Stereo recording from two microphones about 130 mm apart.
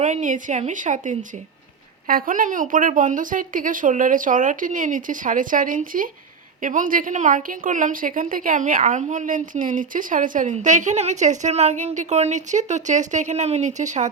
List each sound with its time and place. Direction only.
0.0 s a woman's voice: 75° right (ahead or behind)
2.0 s a woman's voice: 90° right; by 14.1 s 65° right (ahead or behind)